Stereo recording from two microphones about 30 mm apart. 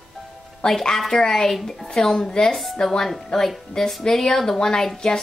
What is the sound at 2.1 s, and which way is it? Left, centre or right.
Speech, left.